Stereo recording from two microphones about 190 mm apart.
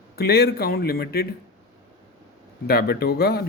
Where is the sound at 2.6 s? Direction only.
55° left (ahead or behind).